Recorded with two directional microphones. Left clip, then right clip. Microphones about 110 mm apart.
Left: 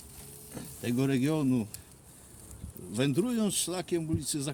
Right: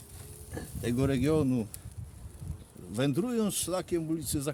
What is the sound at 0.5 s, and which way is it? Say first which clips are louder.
Speech: even; 45° right (ahead or behind).